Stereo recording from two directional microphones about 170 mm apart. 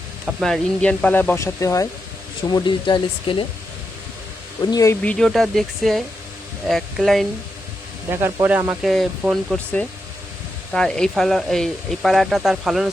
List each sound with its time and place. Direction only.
0.3 s speech: centre (ahead or behind); by 3.4 s 30° left (ahead or behind)
4.6 s speech: 20° left (ahead or behind)
5.0 s speech: 5° left (ahead or behind)
8.1 s speech: 15° right (ahead or behind)
10.7 s speech: 5° left (ahead or behind)